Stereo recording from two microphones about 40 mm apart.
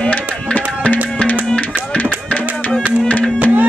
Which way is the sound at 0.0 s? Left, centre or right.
Left.